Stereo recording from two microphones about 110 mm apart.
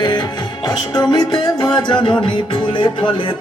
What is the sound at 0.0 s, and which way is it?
Music, 40° left (ahead or behind).